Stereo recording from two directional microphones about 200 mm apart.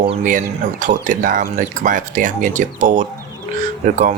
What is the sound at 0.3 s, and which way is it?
Speech, 40° right (ahead or behind).